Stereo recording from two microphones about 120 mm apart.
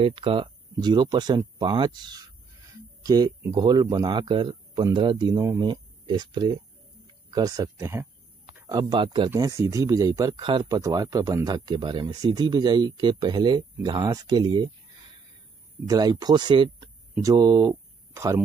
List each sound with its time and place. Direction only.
0.0 s speech: 50° right (ahead or behind); by 5.7 s 30° right (ahead or behind)
5.7 s speech: 40° right (ahead or behind); by 8.1 s 20° right (ahead or behind)
8.6 s speech: 35° right (ahead or behind)
9.3 s speech: 25° right (ahead or behind)
10.4 s speech: 45° right (ahead or behind)
10.7 s speech: 30° right (ahead or behind)
15.9 s speech: 35° right (ahead or behind)
17.2 s speech: 30° right (ahead or behind)